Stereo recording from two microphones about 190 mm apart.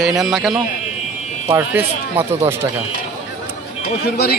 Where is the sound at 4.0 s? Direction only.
55° left (ahead or behind).